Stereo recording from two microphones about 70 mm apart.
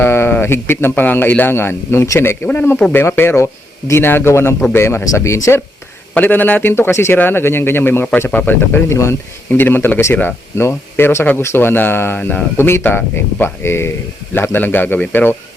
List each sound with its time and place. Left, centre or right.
0.0 s a sound: left
0.4 s speech: left
6.1 s speech: left
8.9 s speech: left